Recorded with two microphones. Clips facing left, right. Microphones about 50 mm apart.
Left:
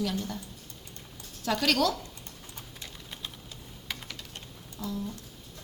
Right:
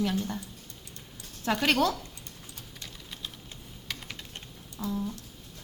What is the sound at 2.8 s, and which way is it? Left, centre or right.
Typing, centre.